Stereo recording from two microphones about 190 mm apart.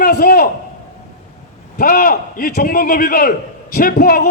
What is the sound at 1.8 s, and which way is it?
Speech, 50° left (ahead or behind).